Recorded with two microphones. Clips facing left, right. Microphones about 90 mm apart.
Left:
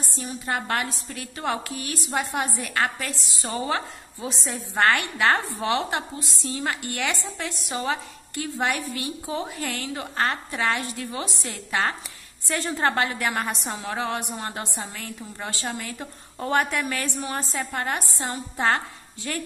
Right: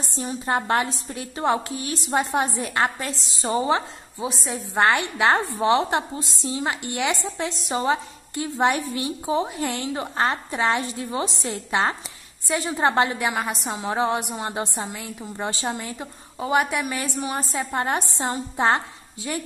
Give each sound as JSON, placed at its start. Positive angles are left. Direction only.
{"t": 0.0, "sound": "a woman's voice", "side_deg": -25}
{"t": 13.3, "sound": "a woman's voice", "side_deg": -5}
{"t": 13.7, "sound": "a woman's voice", "side_deg": -25}